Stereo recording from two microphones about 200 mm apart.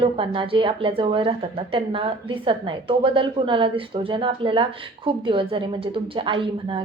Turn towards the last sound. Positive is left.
turn(degrees=-25)  # may be behind; listen again after turning